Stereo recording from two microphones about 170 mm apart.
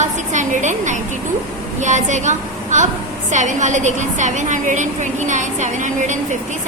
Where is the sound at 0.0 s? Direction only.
45° right (ahead or behind).